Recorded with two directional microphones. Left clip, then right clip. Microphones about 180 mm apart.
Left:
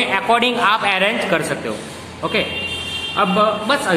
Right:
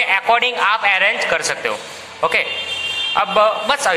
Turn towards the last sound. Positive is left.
turn(degrees=-40)  # may be behind; listen again after turning